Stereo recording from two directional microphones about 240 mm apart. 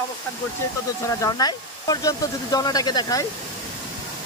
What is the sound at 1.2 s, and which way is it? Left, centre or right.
Speech, centre.